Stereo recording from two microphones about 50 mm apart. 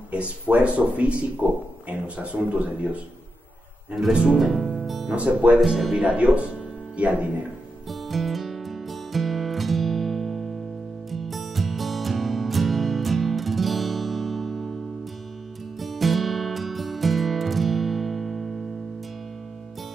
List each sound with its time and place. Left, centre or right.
0.1 s a man's voice: right
4.1 s a man's voice: right
4.4 s speech: centre
4.8 s music: centre
5.1 s a man's voice: right
5.6 s speech: centre
5.9 s a man's voice: right
7.9 s music: centre
15.8 s music: centre